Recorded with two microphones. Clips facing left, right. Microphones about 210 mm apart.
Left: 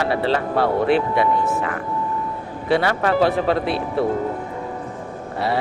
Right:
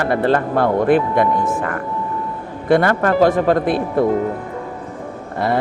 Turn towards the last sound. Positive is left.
turn(degrees=-50)  # may be behind; listen again after turning